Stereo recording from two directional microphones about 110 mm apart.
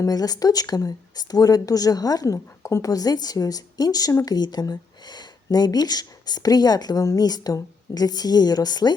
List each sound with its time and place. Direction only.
0.0 s speech: 35° left (ahead or behind)